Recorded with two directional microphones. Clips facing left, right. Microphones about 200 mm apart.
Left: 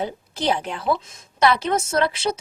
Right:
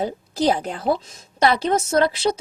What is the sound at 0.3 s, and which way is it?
A woman's voice, 40° right (ahead or behind).